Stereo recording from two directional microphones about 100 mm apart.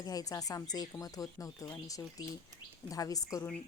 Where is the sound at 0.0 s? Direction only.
35° left (ahead or behind).